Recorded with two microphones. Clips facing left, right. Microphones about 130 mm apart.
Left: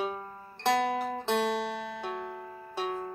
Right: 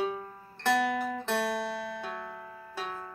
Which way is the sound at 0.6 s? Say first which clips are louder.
Even; 25° left (ahead or behind).